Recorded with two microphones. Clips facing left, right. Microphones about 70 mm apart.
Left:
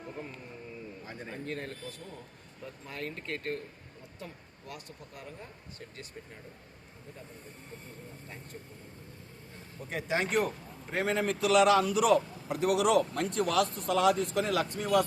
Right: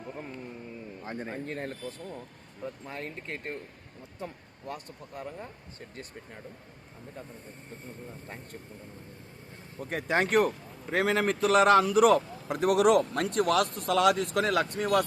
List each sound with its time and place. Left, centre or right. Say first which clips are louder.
1.0 s speech: right 5 dB; right
4.2 s speech: right 6 dB; right
9.9 s a man's voice: right 4 dB; right
10.9 s a man's voice: right 4 dB; right
11.3 s a man's voice: right 2 dB; right